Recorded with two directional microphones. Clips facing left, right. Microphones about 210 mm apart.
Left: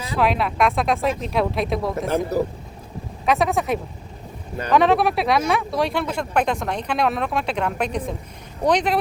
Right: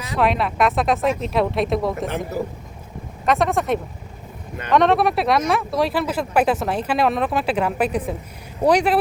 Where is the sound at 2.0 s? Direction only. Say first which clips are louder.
Left 4 dB; 45° left (ahead or behind).